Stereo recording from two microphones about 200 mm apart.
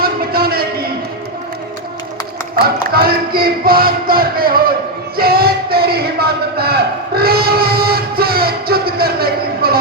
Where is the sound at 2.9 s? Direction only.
50° right (ahead or behind).